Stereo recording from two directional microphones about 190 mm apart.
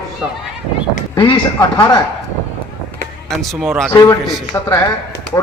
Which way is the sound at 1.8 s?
20° left (ahead or behind).